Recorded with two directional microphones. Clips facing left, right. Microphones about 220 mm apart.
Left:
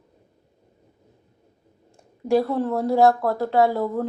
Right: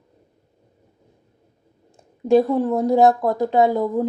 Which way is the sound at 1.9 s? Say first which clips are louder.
Right 4 dB; 20° right (ahead or behind).